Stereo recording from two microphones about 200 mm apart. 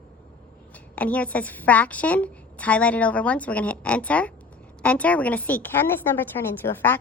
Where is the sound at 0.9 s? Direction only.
5° left (ahead or behind).